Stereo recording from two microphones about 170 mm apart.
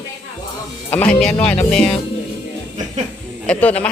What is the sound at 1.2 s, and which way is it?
Speech, 5° left (ahead or behind).